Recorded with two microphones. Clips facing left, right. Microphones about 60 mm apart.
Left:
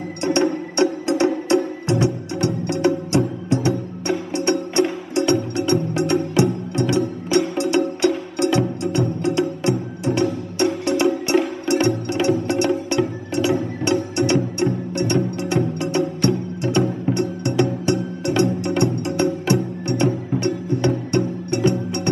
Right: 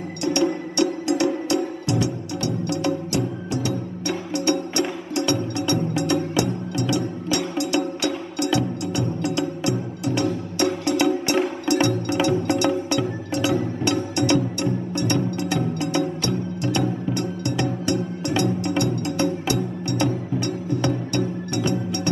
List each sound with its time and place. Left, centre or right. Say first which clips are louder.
0.2 s music: left 2 dB; left